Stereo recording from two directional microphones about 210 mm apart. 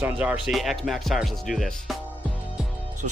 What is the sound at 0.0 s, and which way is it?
Speech, 5° right (ahead or behind).